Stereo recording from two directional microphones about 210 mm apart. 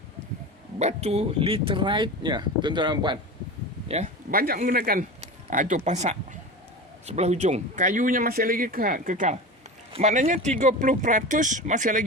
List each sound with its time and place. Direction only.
0.8 s speech: 30° right (ahead or behind)
3.8 s speech: 35° right (ahead or behind)